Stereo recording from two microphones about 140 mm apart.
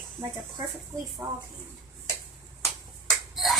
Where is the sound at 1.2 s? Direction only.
25° right (ahead or behind).